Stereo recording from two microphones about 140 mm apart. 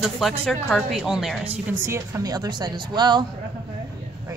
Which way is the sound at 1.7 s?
20° right (ahead or behind).